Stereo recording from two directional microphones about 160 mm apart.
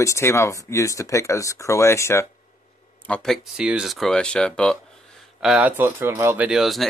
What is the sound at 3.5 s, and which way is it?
Speech, 5° right (ahead or behind).